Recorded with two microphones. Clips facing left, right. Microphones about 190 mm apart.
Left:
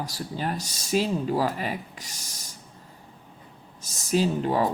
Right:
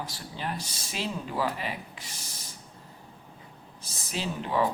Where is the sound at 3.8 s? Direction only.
45° left (ahead or behind).